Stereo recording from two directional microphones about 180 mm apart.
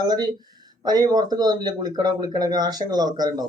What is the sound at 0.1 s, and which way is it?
Speech, 20° right (ahead or behind).